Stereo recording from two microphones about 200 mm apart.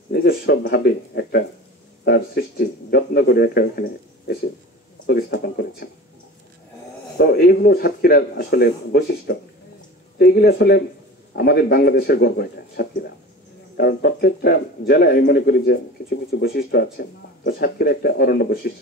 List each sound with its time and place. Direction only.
0.1 s speech: 50° left (ahead or behind)
5.0 s speech: 50° left (ahead or behind)
7.2 s speech: 50° left (ahead or behind)